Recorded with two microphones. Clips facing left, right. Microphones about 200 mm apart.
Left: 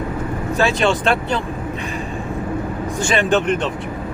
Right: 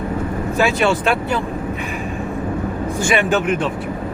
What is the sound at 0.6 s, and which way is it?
Speech, 10° right (ahead or behind).